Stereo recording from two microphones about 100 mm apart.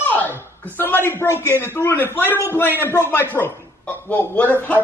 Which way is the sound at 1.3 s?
25° left (ahead or behind).